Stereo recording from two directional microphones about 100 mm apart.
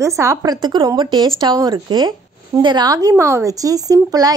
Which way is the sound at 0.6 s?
45° right (ahead or behind).